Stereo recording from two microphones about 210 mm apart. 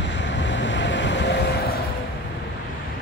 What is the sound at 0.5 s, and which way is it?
Vehicle, 60° left (ahead or behind).